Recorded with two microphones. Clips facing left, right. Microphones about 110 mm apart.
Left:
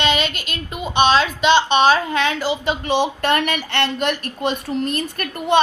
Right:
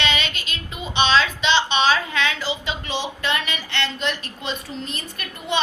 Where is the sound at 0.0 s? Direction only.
50° left (ahead or behind).